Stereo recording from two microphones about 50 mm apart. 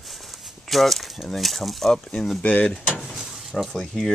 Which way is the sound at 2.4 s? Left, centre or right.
Left.